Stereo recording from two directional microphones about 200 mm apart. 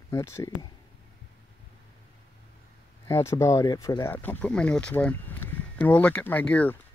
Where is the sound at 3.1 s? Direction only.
15° left (ahead or behind).